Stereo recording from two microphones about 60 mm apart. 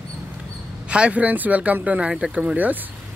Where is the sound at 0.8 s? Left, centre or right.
Centre.